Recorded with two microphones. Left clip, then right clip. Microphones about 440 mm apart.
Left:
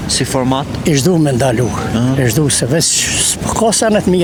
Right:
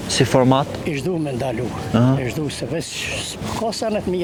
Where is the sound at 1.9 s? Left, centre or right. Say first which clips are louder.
Left 2 dB; right.